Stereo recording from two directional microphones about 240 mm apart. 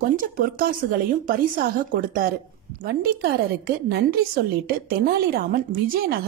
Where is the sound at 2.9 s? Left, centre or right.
Right.